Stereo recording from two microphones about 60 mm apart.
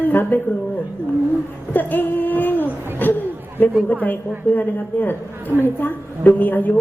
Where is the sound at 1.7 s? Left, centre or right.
Left.